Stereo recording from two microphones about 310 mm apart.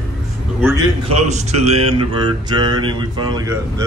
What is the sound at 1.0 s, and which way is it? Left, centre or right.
Speech, right.